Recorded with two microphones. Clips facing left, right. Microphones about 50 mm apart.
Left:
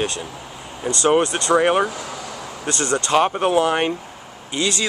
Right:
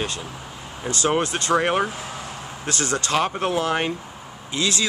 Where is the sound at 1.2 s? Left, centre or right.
Left.